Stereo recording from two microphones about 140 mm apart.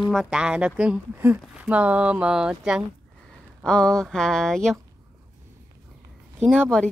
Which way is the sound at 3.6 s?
5° left (ahead or behind).